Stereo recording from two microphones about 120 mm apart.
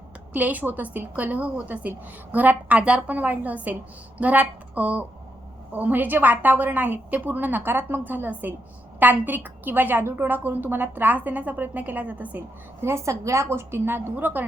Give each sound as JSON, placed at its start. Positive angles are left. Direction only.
{"t": 0.3, "sound": "a woman's voice", "side_deg": -15}